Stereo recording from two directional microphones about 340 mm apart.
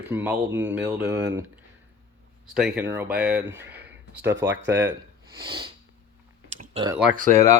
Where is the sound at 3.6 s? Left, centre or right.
Centre.